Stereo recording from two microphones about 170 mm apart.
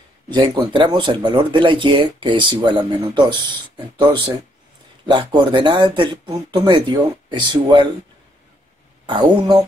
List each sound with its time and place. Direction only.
0.3 s speech: 25° right (ahead or behind)
9.0 s speech: 30° right (ahead or behind)